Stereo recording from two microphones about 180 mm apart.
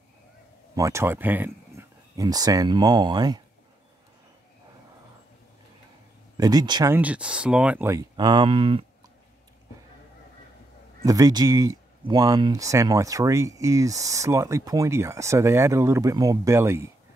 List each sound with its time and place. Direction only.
0.7 s speech: 15° right (ahead or behind)
6.3 s speech: 20° right (ahead or behind)
7.0 s speech: 5° right (ahead or behind); by 8.8 s 30° right (ahead or behind)
11.1 s speech: 20° right (ahead or behind)